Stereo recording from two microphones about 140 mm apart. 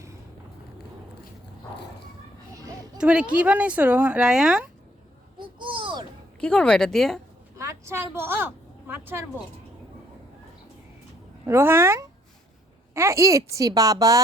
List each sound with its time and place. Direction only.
2.5 s a sound: 25° right (ahead or behind)
3.0 s speech: 5° right (ahead or behind)
5.4 s a sound: 35° right (ahead or behind)
6.4 s speech: 5° left (ahead or behind)
7.5 s a woman's voice: 20° right (ahead or behind)
11.4 s a woman's voice: 15° right (ahead or behind)